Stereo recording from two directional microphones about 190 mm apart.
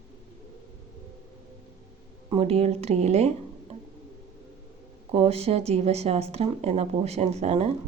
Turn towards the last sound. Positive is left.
turn(degrees=-35)  # may be behind; listen again after turning